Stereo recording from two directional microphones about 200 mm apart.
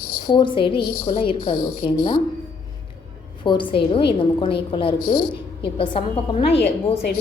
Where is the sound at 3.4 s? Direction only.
25° left (ahead or behind).